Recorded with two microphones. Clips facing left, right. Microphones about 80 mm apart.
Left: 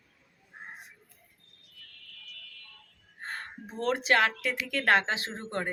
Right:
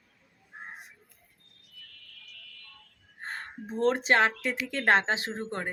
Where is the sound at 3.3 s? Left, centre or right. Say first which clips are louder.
Right 2 dB; right.